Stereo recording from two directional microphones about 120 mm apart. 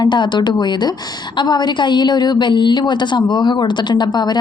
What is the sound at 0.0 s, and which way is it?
A woman's voice, 40° left (ahead or behind).